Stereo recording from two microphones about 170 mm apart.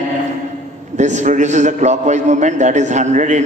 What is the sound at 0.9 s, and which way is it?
A man's voice, 45° right (ahead or behind).